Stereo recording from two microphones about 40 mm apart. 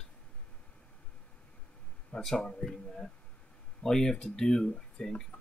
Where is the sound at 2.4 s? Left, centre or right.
Centre.